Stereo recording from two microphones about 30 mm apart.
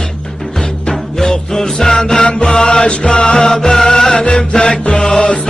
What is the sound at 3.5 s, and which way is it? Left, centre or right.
Music, centre.